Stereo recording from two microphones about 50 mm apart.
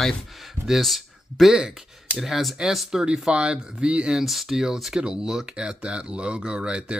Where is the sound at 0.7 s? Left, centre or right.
Centre.